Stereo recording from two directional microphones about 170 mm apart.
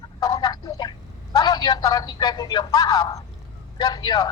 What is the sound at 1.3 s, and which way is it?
A man's voice, 25° left (ahead or behind).